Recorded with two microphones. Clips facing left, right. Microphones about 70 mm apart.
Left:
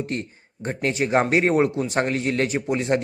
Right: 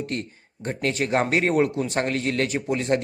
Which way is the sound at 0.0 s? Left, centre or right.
Left.